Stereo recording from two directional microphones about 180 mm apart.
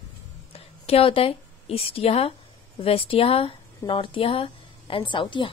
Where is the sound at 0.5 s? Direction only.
35° left (ahead or behind).